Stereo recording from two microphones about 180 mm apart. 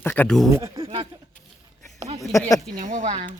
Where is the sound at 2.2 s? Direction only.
20° left (ahead or behind).